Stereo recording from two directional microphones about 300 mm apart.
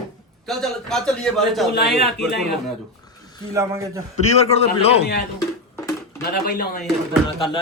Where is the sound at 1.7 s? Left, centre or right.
Left.